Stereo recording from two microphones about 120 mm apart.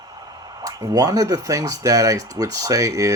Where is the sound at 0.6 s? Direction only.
30° right (ahead or behind).